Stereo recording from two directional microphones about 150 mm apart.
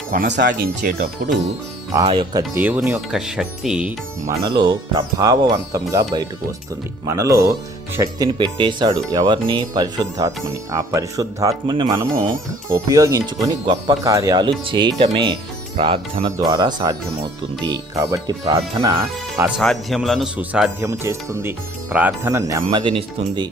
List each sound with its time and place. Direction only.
0.1 s speech: 80° right
2.6 s speech: 10° right (ahead or behind)
4.3 s speech: 30° right (ahead or behind)
7.0 s speech: 20° right (ahead or behind)
19.5 s speech: centre (ahead or behind); by 22.8 s 20° right (ahead or behind)
22.8 s speech: 35° right (ahead or behind)